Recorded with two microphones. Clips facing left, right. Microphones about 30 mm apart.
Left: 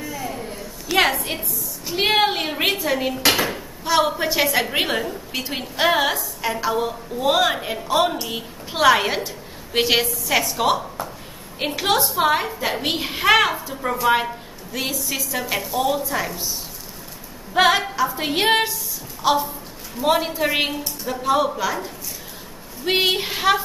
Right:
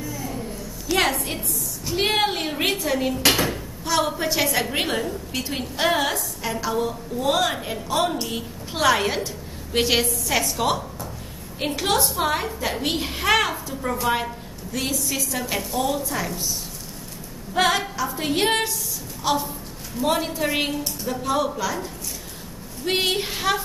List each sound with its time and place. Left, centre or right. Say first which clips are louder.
0.0 s a sound: left 2 dB; left
1.9 s a woman's voice: left 3 dB; centre
17.6 s a woman's voice: left 4 dB; centre